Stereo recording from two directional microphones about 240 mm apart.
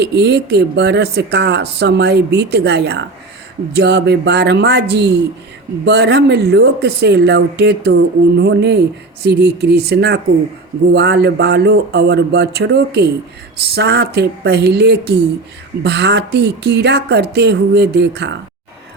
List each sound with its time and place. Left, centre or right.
0.0 s speech: right